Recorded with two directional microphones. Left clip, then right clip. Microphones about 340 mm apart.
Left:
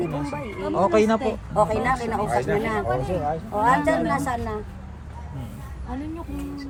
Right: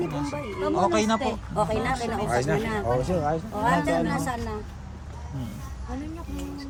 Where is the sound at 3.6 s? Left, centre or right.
Centre.